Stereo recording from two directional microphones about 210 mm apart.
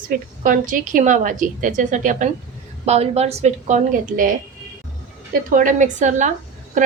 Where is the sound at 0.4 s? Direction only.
40° right (ahead or behind).